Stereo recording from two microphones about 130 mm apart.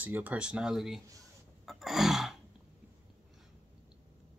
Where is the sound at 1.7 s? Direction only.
Centre (ahead or behind).